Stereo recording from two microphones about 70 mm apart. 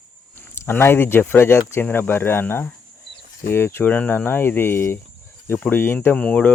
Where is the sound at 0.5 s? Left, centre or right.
Left.